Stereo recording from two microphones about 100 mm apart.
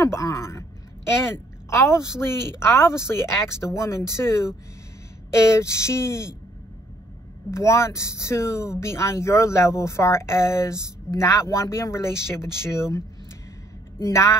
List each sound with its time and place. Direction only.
0.0 s a sound: 30° left (ahead or behind)
1.2 s speech: 25° left (ahead or behind)
7.5 s speech: 30° left (ahead or behind)
14.0 s speech: 30° left (ahead or behind)